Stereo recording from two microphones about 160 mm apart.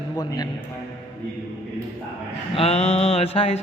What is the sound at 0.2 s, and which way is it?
Speech, 25° left (ahead or behind).